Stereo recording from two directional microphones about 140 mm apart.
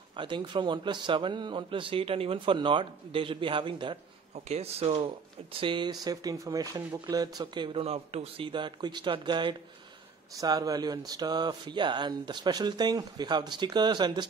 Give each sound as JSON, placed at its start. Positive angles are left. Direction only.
{"t": 0.1, "sound": "speech", "side_deg": -35}
{"t": 4.5, "sound": "speech", "side_deg": -45}